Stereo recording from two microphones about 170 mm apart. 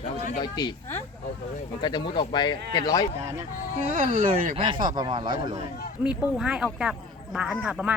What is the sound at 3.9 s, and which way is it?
Speech, 50° right (ahead or behind).